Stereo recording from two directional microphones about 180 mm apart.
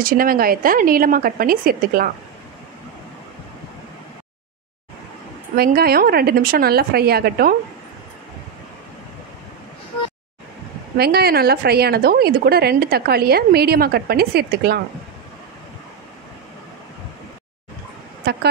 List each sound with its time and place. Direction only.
0.0 s speech: 50° right (ahead or behind)
5.6 s a woman's voice: 60° right (ahead or behind)
11.0 s a woman's voice: 60° right (ahead or behind)